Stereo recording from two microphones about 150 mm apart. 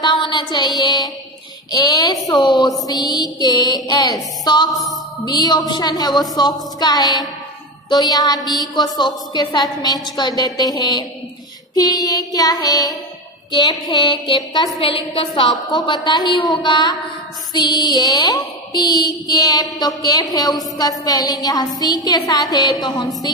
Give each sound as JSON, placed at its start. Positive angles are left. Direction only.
{"t": 0.0, "sound": "music", "side_deg": 30}
{"t": 1.8, "sound": "a woman's voice", "side_deg": 25}
{"t": 4.7, "sound": "a sound", "side_deg": 0}
{"t": 5.2, "sound": "a woman's voice", "side_deg": 30}